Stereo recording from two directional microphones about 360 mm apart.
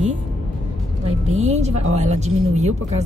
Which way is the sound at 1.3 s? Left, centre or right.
Centre.